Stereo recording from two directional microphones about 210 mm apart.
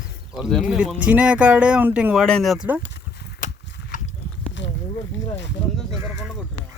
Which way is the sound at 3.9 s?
40° left (ahead or behind).